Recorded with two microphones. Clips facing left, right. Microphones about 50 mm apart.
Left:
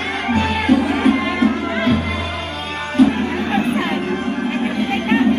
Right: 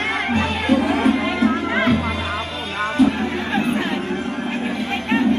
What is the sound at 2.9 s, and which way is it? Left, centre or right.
Music, left.